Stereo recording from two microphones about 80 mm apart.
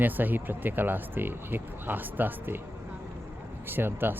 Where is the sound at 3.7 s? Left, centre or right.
Right.